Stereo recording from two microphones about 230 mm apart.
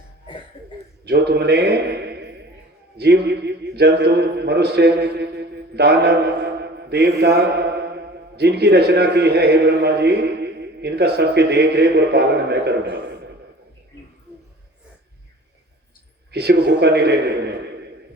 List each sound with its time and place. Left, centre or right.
1.0 s a man's voice: right
6.6 s mantra: right
8.4 s a man's voice: right
16.3 s a man's voice: right